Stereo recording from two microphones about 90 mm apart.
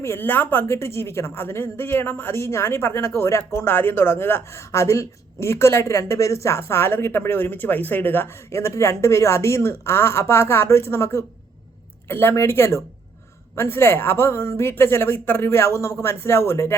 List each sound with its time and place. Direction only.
0.0 s speech: 25° left (ahead or behind)